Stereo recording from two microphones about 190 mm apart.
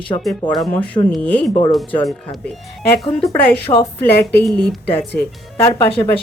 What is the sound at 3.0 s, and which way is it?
Speech, 5° left (ahead or behind).